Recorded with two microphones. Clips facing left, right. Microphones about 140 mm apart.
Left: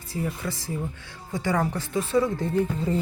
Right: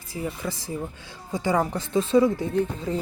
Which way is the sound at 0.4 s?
15° right (ahead or behind).